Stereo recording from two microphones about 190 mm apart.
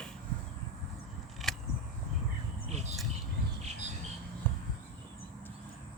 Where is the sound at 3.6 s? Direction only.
35° right (ahead or behind).